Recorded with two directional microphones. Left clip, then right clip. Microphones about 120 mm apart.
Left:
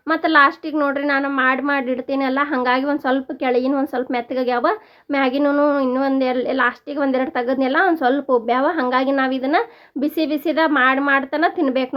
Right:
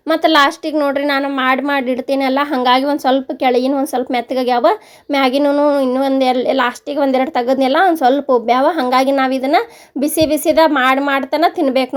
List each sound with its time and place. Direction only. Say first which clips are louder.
0.1 s a woman's voice: right 3 dB; 35° right (ahead or behind)
5.4 s a woman's voice: right 4 dB; 20° right (ahead or behind)